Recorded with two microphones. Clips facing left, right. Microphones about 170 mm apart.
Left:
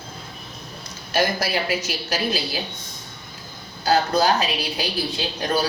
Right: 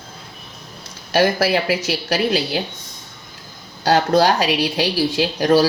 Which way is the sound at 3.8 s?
85° right.